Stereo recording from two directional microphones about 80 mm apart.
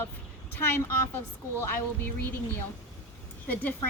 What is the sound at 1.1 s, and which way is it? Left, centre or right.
A woman's voice, left.